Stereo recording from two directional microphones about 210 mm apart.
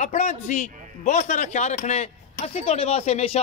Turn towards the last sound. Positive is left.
turn(degrees=30)  # may be behind; listen again after turning